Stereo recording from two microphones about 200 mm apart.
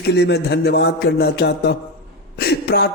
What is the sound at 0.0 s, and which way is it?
A man's voice, 60° left (ahead or behind).